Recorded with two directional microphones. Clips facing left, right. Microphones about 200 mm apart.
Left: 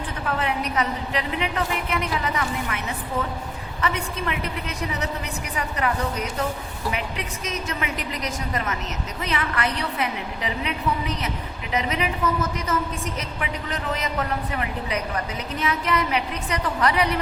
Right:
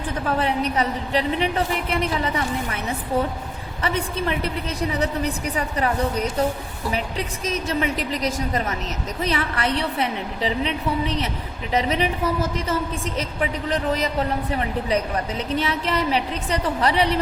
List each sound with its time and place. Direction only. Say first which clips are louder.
0.3 s a woman's voice: right 3 dB; 35° right (ahead or behind)
3.8 s a woman's voice: right 2 dB; 30° right (ahead or behind)
7.4 s a woman's voice: right 6 dB; 30° right (ahead or behind)